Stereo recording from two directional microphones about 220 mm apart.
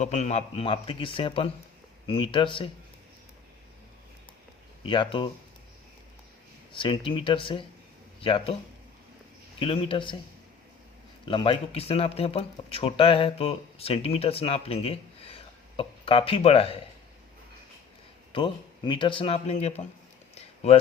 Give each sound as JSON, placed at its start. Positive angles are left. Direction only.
{"t": 0.0, "sound": "speech", "side_deg": 30}
{"t": 4.9, "sound": "speech", "side_deg": 20}
{"t": 6.7, "sound": "speech", "side_deg": 20}
{"t": 9.6, "sound": "speech", "side_deg": 25}
{"t": 11.3, "sound": "speech", "side_deg": 25}
{"t": 18.3, "sound": "speech", "side_deg": 20}